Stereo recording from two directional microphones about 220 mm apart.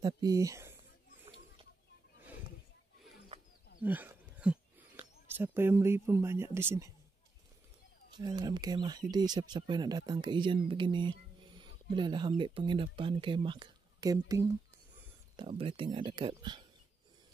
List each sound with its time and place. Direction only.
0.0 s speech: 15° right (ahead or behind)
3.8 s speech: 10° right (ahead or behind)
8.1 s speech: 20° right (ahead or behind)